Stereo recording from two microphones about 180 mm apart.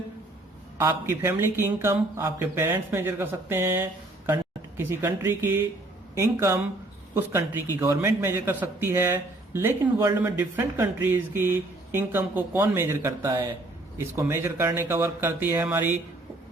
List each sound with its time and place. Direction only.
0.8 s a man's voice: 15° right (ahead or behind)